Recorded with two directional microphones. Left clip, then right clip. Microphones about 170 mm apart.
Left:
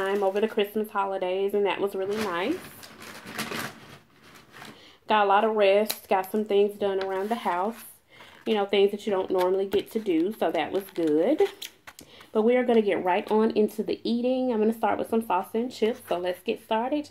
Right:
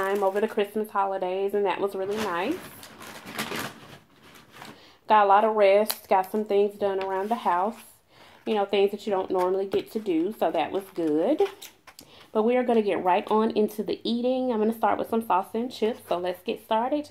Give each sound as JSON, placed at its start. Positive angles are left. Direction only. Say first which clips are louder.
{"t": 0.0, "sound": "speech", "louder": "even", "side_deg": 0}
{"t": 5.0, "sound": "speech", "louder": "right 3 dB", "side_deg": 0}